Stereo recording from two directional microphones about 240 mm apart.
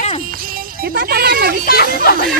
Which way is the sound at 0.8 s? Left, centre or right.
Right.